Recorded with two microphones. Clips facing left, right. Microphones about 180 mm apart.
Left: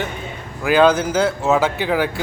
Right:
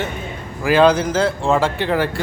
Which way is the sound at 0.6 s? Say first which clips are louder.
Right 1 dB; centre (ahead or behind).